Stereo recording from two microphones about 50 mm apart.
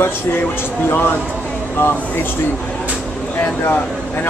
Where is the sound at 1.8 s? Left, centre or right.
Left.